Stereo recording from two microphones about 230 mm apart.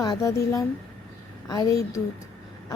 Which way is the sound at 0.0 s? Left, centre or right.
Centre.